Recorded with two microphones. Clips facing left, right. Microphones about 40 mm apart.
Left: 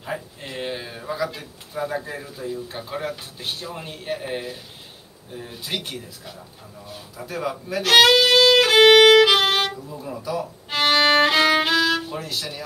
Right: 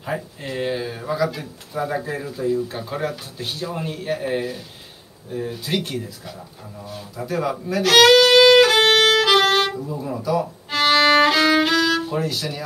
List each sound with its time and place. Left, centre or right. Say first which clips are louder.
0.0 s a sound: right 3 dB; centre
0.5 s a sound: right 6 dB; centre
1.1 s speech: right 4 dB; centre
1.4 s speech: right 2 dB; centre
2.7 s speech: right 3 dB; centre
3.6 s speech: right 5 dB; centre
8.4 s violin: right 2 dB; centre
9.7 s speech: right 5 dB; centre
10.7 s violin: right 2 dB; centre
12.3 s speech: right 3 dB; centre